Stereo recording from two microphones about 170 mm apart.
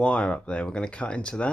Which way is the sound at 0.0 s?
5° left (ahead or behind).